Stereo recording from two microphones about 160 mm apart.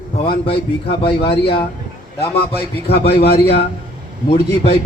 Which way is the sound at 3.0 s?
90° left.